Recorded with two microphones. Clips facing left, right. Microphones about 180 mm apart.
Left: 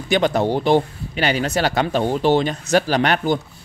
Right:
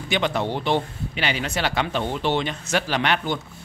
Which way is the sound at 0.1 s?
40° left (ahead or behind).